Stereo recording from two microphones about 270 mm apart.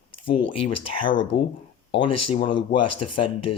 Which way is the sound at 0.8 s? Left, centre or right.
Centre.